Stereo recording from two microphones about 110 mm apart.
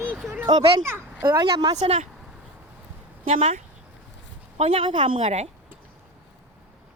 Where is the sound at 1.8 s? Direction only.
55° right (ahead or behind).